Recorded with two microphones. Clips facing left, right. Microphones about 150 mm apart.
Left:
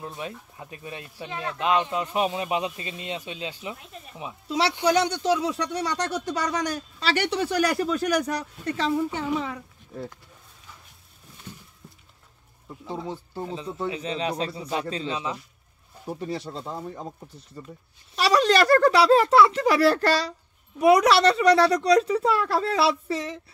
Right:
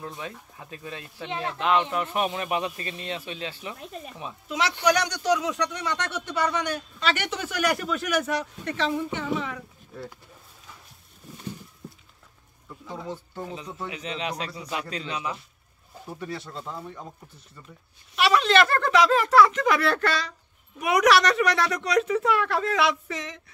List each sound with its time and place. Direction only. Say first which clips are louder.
0.0 s speech: left 2 dB; 20° left (ahead or behind)
1.3 s speech: right 2 dB; 20° right (ahead or behind)
1.6 s speech: even; 15° left (ahead or behind)
4.5 s speech: left 1 dB; 35° left (ahead or behind)
13.5 s speech: left 8 dB; 30° left (ahead or behind)
18.1 s speech: left 1 dB; 35° left (ahead or behind)